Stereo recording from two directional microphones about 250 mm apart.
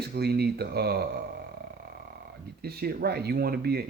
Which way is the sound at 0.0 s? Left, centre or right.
Right.